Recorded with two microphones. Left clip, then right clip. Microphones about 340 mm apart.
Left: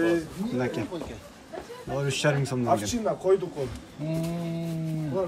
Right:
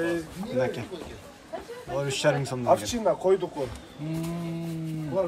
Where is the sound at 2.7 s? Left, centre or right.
Right.